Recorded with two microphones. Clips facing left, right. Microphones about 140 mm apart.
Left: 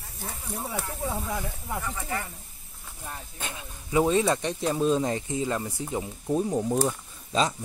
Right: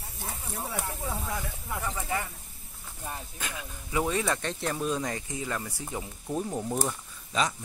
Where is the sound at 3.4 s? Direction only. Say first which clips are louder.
Even; 25° left (ahead or behind).